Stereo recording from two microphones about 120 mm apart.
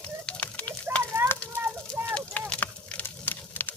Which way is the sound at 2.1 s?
10° left (ahead or behind).